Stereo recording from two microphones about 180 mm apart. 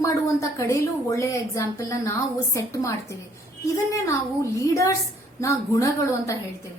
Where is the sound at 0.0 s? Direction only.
20° left (ahead or behind).